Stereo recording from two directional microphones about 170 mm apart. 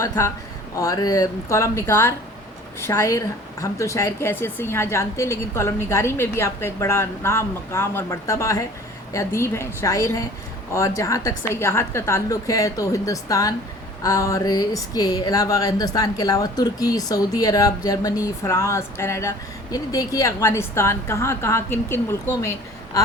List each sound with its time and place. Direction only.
0.8 s a woman's voice: 20° left (ahead or behind)